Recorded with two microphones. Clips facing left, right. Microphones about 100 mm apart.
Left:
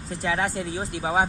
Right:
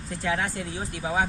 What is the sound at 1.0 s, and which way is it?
Speech, 30° left (ahead or behind).